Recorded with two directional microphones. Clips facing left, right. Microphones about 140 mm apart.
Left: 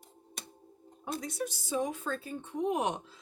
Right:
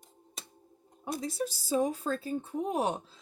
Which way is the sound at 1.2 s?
30° right (ahead or behind).